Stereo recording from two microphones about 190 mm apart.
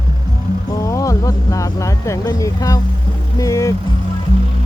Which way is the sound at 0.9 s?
15° left (ahead or behind).